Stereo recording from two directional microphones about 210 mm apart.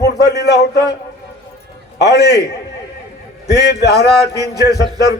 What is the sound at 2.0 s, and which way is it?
Speech, 50° left (ahead or behind).